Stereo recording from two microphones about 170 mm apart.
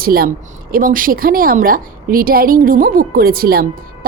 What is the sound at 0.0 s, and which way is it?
A woman's voice, 60° right (ahead or behind).